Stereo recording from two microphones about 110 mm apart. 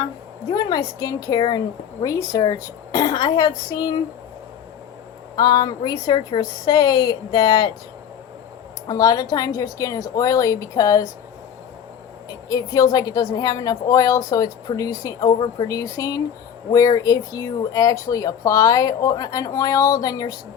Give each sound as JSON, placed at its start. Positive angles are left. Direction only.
{"t": 0.5, "sound": "a woman's voice", "side_deg": 35}
{"t": 5.4, "sound": "a woman's voice", "side_deg": 40}
{"t": 8.9, "sound": "a woman's voice", "side_deg": 35}
{"t": 12.3, "sound": "a woman's voice", "side_deg": 35}